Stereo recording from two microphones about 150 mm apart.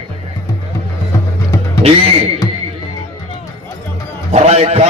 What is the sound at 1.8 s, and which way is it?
Speech, 40° right (ahead or behind).